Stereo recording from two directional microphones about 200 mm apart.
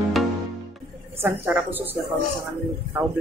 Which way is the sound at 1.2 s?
10° right (ahead or behind).